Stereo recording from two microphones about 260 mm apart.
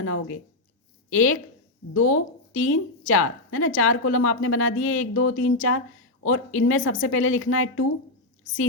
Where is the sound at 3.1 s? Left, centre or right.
Left.